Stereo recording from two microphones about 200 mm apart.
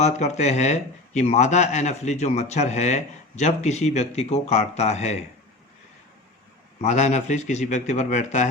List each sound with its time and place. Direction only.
0.0 s speech: 35° left (ahead or behind)
6.8 s speech: 35° left (ahead or behind)